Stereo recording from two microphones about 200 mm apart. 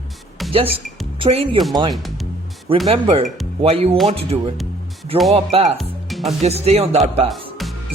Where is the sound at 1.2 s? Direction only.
25° right (ahead or behind).